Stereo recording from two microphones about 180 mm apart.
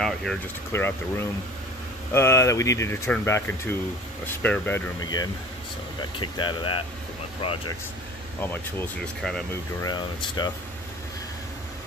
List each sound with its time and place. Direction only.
0.0 s speech: centre (ahead or behind)
0.7 s speech: 10° left (ahead or behind); by 7.6 s 30° left (ahead or behind)
8.4 s speech: 10° left (ahead or behind)
9.8 s speech: 25° left (ahead or behind)